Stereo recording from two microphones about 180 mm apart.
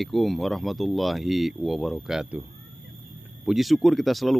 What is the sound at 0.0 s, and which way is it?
Speech, centre (ahead or behind).